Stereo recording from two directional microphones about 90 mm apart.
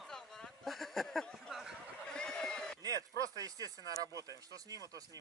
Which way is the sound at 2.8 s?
45° right (ahead or behind).